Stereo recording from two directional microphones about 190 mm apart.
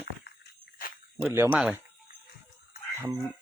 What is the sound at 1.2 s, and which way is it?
Speech, 10° right (ahead or behind).